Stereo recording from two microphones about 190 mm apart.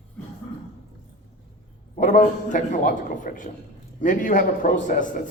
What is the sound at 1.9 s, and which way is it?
A man's voice, 40° left (ahead or behind).